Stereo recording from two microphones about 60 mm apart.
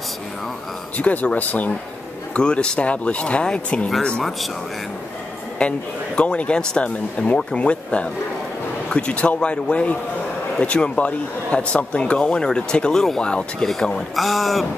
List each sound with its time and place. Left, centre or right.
0.9 s speech: left
2.3 s speech: centre
5.6 s speech: left
14.1 s speech: centre